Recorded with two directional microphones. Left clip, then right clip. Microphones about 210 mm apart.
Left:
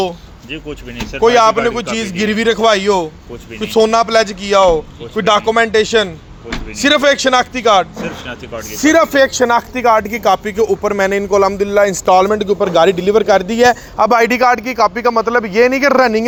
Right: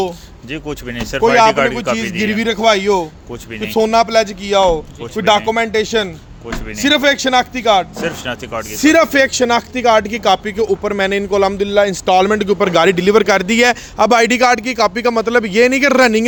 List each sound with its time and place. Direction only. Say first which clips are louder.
0.5 s speech: right 2 dB; 45° right (ahead or behind)
1.2 s speech: left 1 dB; centre (ahead or behind)
7.9 s speech: right 3 dB; 50° right (ahead or behind)
8.8 s a man's voice: left 1 dB; 20° right (ahead or behind)